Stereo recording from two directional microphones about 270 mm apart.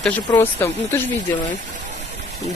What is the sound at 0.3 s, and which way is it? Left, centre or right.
Speech, centre.